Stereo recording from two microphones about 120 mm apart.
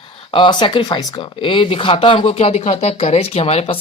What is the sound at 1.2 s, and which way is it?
Speech, 45° left (ahead or behind).